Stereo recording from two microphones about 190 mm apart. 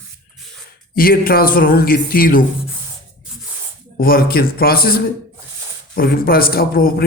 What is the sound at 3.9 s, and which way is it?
A man's voice, 50° left (ahead or behind).